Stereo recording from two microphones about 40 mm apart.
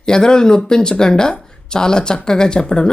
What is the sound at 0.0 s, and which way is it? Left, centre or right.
Speech, centre.